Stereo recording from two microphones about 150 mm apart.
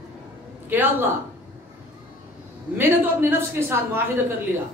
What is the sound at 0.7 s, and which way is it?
Speech, 15° right (ahead or behind).